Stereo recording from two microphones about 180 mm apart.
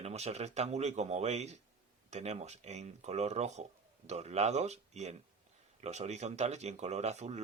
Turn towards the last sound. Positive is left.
turn(degrees=-40)  # may be behind; listen again after turning